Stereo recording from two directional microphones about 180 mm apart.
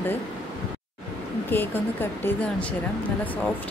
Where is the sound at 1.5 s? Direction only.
10° left (ahead or behind).